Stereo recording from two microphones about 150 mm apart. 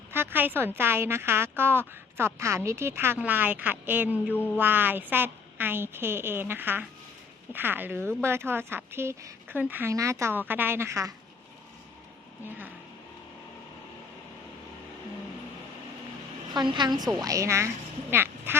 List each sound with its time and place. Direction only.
0.1 s a woman's voice: 15° right (ahead or behind)
16.6 s a woman's voice: 30° right (ahead or behind); by 18.6 s 15° right (ahead or behind)